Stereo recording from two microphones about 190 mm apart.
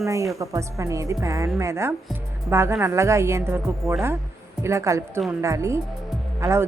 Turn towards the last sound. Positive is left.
turn(degrees=-15)  # may be behind; listen again after turning